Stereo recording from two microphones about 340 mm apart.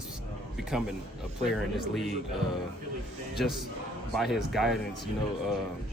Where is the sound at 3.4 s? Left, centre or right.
Centre.